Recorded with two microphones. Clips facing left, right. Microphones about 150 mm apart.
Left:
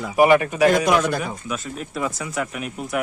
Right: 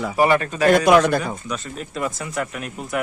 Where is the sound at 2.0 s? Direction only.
Centre (ahead or behind).